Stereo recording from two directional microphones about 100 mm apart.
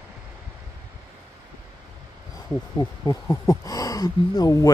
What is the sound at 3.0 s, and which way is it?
Speech, 35° left (ahead or behind).